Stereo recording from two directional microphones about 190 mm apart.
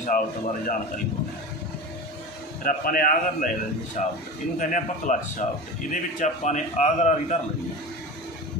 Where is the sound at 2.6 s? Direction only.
50° left (ahead or behind).